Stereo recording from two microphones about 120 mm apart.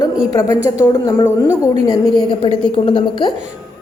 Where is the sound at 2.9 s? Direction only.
40° left (ahead or behind).